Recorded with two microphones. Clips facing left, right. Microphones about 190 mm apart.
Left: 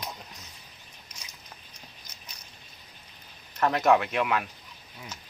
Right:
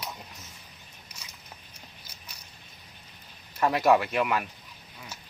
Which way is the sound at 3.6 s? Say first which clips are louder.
Even; 10° right (ahead or behind).